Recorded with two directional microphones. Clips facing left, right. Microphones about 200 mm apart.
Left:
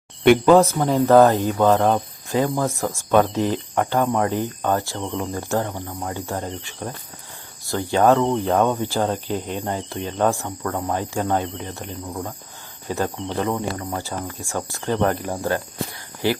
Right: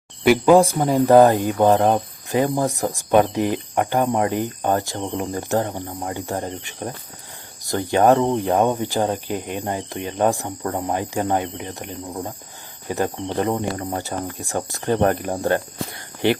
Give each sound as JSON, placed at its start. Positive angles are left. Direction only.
{"t": 0.2, "sound": "speech", "side_deg": -10}
{"t": 14.7, "sound": "speech", "side_deg": -40}